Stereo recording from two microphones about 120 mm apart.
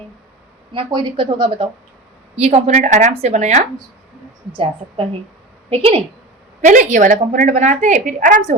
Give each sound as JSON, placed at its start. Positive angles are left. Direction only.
{"t": 0.9, "sound": "speech", "side_deg": -40}
{"t": 2.4, "sound": "a woman's voice", "side_deg": -65}
{"t": 4.5, "sound": "speech", "side_deg": -50}
{"t": 6.7, "sound": "a woman's voice", "side_deg": -90}